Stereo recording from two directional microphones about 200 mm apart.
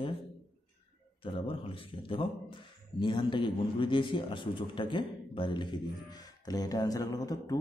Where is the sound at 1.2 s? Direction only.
25° left (ahead or behind).